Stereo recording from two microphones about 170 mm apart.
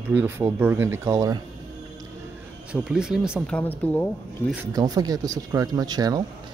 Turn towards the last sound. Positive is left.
turn(degrees=-25)  # may be behind; listen again after turning